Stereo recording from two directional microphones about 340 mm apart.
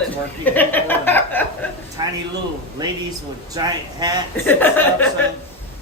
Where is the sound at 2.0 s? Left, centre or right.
Centre.